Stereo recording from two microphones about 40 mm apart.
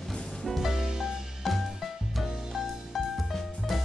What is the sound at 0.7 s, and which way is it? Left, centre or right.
Music, centre.